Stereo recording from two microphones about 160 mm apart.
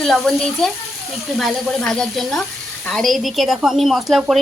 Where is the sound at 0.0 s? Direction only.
Centre (ahead or behind).